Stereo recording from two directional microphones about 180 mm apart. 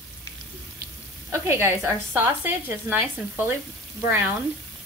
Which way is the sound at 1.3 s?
15° right (ahead or behind).